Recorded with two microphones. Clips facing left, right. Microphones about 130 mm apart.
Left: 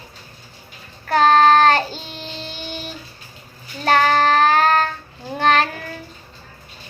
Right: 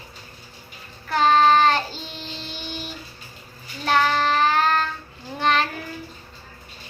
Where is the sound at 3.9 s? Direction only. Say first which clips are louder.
Left 4 dB; 55° left (ahead or behind).